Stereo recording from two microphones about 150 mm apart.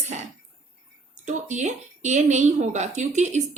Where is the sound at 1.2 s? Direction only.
50° right (ahead or behind).